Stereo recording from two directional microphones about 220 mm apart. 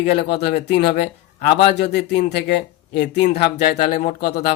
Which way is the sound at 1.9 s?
50° left (ahead or behind).